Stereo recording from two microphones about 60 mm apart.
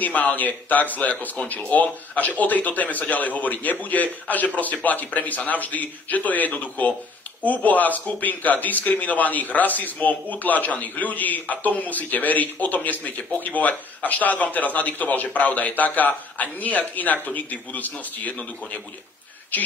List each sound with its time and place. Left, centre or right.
0.0 s speech: left